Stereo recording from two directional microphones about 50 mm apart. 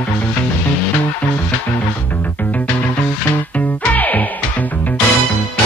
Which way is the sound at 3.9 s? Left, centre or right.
Left.